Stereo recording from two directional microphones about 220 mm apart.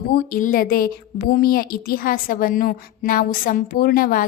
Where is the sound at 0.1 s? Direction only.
40° left (ahead or behind).